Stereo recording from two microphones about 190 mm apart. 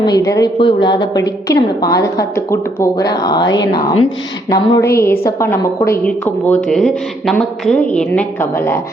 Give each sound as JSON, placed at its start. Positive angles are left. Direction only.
{"t": 0.0, "sound": "a woman's voice", "side_deg": 20}